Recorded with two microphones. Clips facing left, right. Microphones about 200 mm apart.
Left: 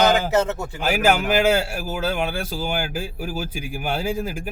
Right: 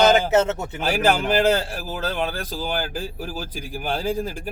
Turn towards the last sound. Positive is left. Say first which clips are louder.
# even
turn(degrees=10)  # may be behind; listen again after turning